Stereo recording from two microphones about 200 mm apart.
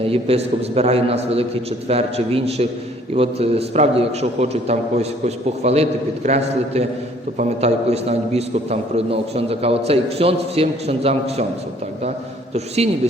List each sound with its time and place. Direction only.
0.0 s a man's voice: 30° right (ahead or behind)
12.5 s a man's voice: 30° right (ahead or behind)